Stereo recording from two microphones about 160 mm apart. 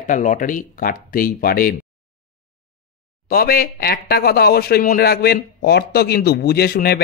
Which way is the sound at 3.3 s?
70° left (ahead or behind).